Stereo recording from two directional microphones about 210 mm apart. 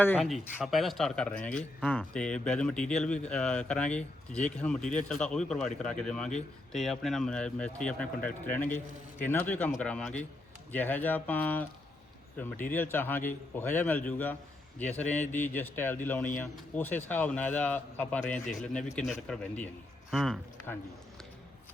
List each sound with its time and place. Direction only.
0.2 s speech: centre (ahead or behind)
12.6 s speech: 10° left (ahead or behind)